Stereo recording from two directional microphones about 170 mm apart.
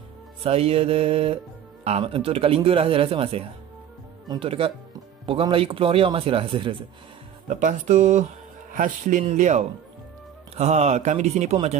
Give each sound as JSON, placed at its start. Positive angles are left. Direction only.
{"t": 0.4, "sound": "speech", "side_deg": -35}
{"t": 7.4, "sound": "speech", "side_deg": -45}